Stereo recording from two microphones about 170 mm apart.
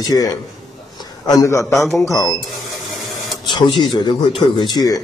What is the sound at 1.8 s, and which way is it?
Speech, centre (ahead or behind).